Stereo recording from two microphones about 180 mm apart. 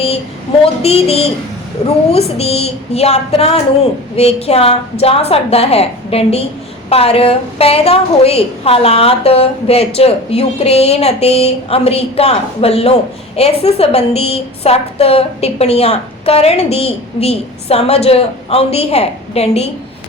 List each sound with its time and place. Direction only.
0.6 s a woman's voice: 35° left (ahead or behind)